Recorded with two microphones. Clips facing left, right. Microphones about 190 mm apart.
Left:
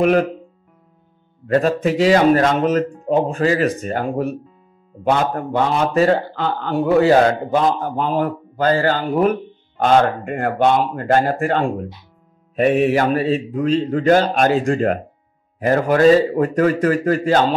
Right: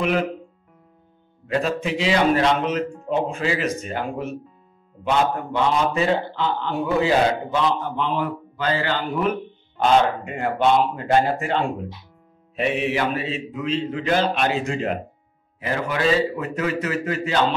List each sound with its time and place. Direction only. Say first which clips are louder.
0.0 s a man's voice: left 7 dB; 45° left (ahead or behind)
1.5 s a man's voice: left 6 dB; 45° left (ahead or behind)